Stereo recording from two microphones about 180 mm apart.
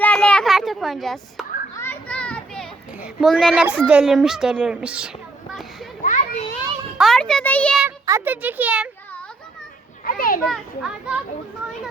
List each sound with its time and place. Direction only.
0.0 s children playing: 5° left (ahead or behind)
1.7 s children playing: 10° left (ahead or behind)
3.0 s a woman's voice: 5° right (ahead or behind)
6.0 s children playing: 45° left (ahead or behind)
7.0 s a woman's voice: 5° left (ahead or behind)
7.8 s speech: 15° right (ahead or behind)
10.0 s a child's voice: 50° left (ahead or behind)
10.5 s a woman's voice: 5° right (ahead or behind)